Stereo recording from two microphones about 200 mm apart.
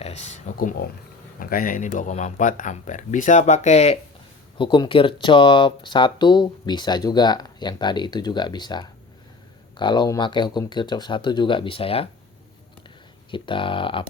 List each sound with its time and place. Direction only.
0.0 s speech: 35° left (ahead or behind)
13.3 s speech: 25° left (ahead or behind)